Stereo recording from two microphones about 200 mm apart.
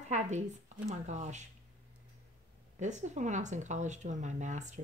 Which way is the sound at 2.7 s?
35° right (ahead or behind).